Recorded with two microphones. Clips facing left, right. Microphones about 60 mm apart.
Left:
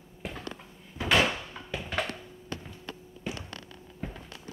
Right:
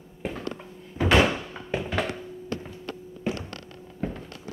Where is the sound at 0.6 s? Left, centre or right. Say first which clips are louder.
Right 9 dB; right.